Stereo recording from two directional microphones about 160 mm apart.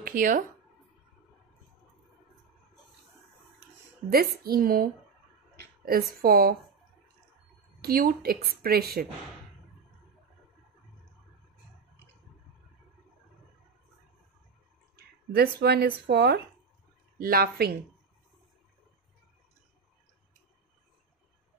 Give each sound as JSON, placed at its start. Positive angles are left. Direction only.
{"t": 0.0, "sound": "speech", "side_deg": -55}
{"t": 4.1, "sound": "a woman's voice", "side_deg": -70}
{"t": 7.8, "sound": "a woman's voice", "side_deg": -70}
{"t": 15.0, "sound": "speech", "side_deg": -80}
{"t": 17.2, "sound": "a woman's voice", "side_deg": -70}